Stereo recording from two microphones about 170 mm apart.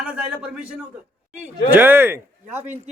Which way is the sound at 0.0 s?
5° right (ahead or behind).